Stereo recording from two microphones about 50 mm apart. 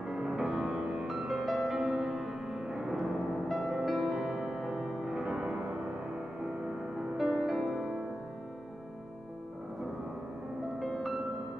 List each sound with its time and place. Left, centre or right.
0.0 s music: centre
1.0 s music: centre
7.0 s music: centre
10.8 s music: centre